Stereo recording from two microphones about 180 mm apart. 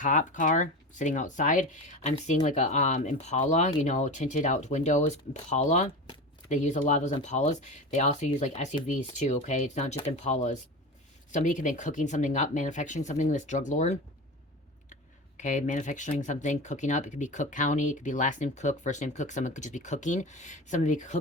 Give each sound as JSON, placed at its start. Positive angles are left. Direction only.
{"t": 0.0, "sound": "speech", "side_deg": 45}
{"t": 15.4, "sound": "speech", "side_deg": 45}